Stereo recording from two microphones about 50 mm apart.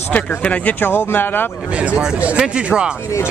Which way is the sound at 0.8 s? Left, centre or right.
Left.